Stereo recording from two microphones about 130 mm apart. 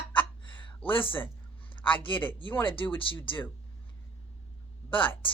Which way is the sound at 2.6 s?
40° left (ahead or behind).